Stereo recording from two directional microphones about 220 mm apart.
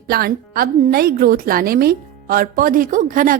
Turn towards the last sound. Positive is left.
turn(degrees=-35)  # may be behind; listen again after turning